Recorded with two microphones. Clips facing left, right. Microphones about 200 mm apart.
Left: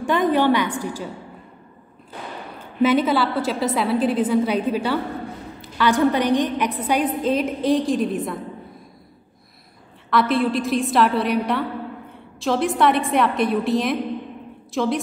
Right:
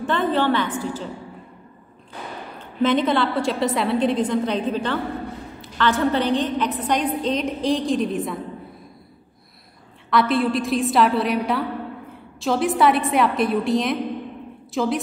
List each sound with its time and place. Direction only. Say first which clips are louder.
0.0 s a woman's voice: left 2 dB; 10° left (ahead or behind)
2.8 s a woman's voice: left 1 dB; 5° left (ahead or behind)
10.0 s a woman's voice: even; centre (ahead or behind)